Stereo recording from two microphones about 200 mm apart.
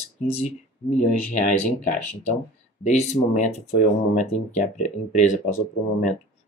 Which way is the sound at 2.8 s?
35° left (ahead or behind).